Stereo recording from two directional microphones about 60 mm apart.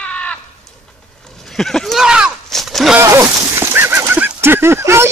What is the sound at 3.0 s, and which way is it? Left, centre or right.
Horse, right.